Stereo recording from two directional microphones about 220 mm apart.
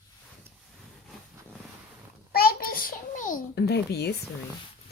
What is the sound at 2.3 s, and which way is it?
Babbling, 45° left (ahead or behind).